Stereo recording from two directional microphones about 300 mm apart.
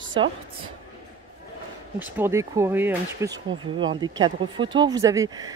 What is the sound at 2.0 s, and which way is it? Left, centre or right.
Speech, centre.